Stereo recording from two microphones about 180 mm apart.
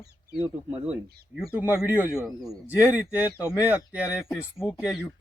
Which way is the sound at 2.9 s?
10° right (ahead or behind).